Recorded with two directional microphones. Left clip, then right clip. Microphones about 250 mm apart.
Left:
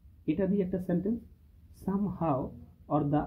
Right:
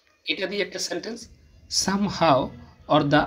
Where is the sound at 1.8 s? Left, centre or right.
Centre.